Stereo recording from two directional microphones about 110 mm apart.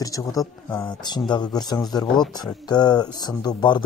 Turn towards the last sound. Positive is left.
turn(degrees=40)  # may be behind; listen again after turning